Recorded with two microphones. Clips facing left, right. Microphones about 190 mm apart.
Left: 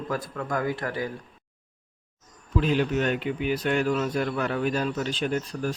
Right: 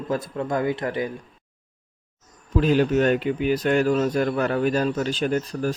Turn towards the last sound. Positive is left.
turn(degrees=-40)  # may be behind; listen again after turning